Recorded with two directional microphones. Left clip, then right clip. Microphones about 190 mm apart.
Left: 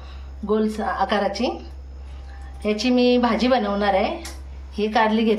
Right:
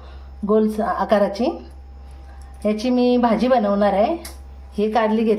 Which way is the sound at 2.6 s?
50° right (ahead or behind).